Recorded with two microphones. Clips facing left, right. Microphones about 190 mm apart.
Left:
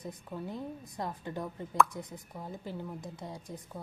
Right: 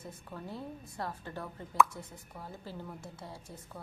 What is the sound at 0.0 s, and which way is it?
Speech, 15° left (ahead or behind).